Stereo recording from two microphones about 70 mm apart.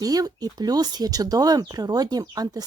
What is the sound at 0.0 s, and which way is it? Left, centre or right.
A woman's voice, right.